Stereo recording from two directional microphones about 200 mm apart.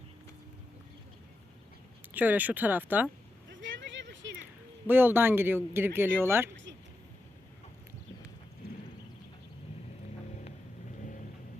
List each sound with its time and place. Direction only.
2.1 s speech: 10° right (ahead or behind)
3.5 s a sound: 70° right (ahead or behind)
4.9 s speech: 10° right (ahead or behind)